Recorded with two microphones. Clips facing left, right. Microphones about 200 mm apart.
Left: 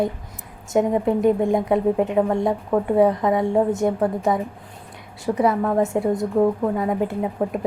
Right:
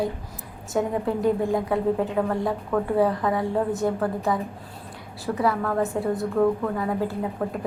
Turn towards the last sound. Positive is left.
turn(degrees=20)  # may be behind; listen again after turning